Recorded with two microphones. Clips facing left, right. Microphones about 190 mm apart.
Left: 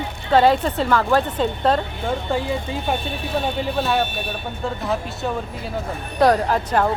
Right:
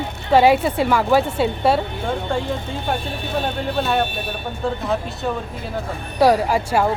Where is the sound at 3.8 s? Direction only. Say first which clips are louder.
Right 1 dB; centre (ahead or behind).